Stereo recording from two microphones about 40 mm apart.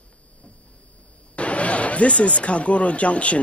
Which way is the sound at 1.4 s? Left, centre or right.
Left.